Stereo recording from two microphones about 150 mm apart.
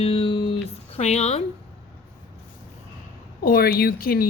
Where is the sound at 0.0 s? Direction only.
35° left (ahead or behind).